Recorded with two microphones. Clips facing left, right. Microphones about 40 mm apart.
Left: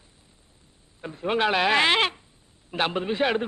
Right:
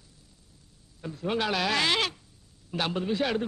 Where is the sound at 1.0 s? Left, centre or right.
Left.